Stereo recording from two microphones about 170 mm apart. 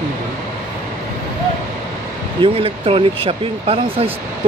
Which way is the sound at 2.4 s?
35° right (ahead or behind).